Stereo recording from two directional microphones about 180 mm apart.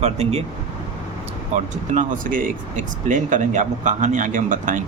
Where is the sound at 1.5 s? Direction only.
45° right (ahead or behind).